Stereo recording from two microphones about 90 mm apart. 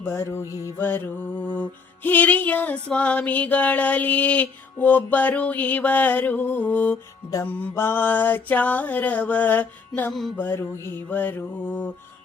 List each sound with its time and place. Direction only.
0.0 s music: 30° left (ahead or behind)
10.1 s music: centre (ahead or behind)
10.3 s music: 25° left (ahead or behind)